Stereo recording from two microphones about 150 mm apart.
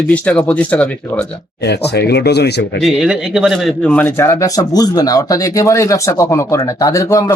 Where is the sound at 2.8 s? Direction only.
5° right (ahead or behind); by 7.2 s 20° left (ahead or behind).